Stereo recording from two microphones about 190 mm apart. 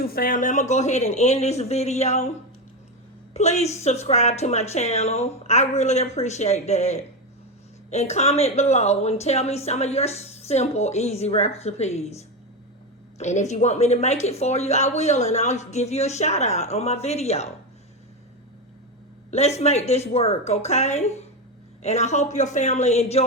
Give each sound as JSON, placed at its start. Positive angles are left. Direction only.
{"t": 0.1, "sound": "speech", "side_deg": 50}
{"t": 3.3, "sound": "speech", "side_deg": 35}
{"t": 19.3, "sound": "speech", "side_deg": 35}